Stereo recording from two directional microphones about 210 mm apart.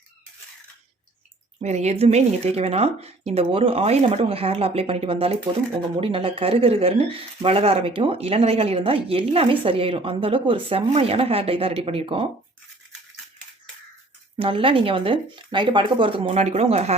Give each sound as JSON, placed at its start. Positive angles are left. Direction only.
{"t": 1.6, "sound": "speech", "side_deg": -30}
{"t": 14.3, "sound": "speech", "side_deg": -25}